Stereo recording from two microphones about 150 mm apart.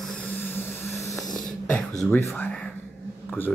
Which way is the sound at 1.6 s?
5° left (ahead or behind).